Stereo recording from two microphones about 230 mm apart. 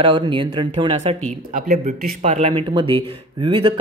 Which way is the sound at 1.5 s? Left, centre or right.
Right.